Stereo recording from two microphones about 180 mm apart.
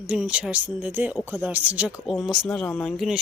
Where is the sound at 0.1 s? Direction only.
5° right (ahead or behind).